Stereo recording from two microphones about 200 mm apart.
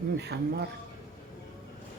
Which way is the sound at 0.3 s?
55° right (ahead or behind).